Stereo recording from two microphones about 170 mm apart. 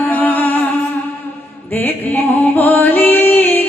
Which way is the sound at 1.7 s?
10° left (ahead or behind).